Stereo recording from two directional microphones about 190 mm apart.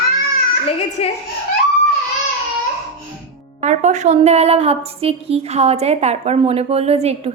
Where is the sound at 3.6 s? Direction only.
40° right (ahead or behind).